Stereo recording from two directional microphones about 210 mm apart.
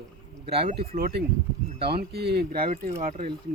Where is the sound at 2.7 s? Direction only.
40° right (ahead or behind).